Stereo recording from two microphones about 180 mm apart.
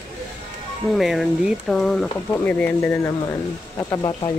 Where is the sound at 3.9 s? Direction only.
25° left (ahead or behind).